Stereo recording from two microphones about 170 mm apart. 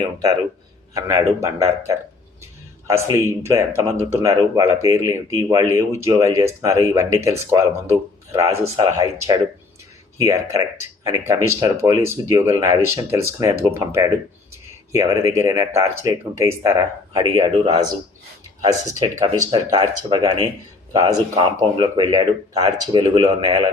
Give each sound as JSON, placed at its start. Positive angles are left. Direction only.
{"t": 0.9, "sound": "a man's voice", "side_deg": -15}
{"t": 17.3, "sound": "speech", "side_deg": -35}
{"t": 18.6, "sound": "speech", "side_deg": -20}